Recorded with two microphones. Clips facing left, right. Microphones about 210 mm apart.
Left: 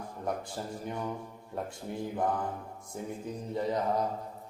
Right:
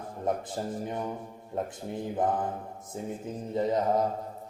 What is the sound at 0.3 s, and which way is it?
Mantra, 20° right (ahead or behind).